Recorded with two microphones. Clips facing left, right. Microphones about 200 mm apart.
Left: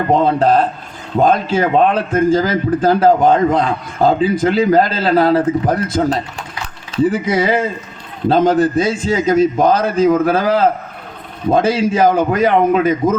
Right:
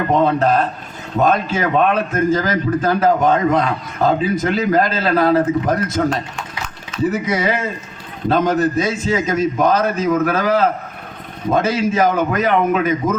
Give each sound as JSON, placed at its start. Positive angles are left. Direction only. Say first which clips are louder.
{"t": 0.1, "sound": "a man's voice", "louder": "left 3 dB", "side_deg": 30}